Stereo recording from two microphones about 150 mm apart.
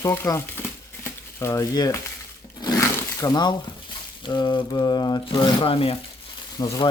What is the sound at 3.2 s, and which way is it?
Speech, 30° left (ahead or behind).